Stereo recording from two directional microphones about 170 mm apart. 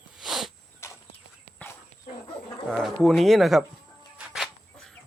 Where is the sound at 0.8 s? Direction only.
15° left (ahead or behind).